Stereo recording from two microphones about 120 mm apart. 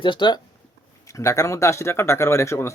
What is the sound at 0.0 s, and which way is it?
Speech, 40° left (ahead or behind).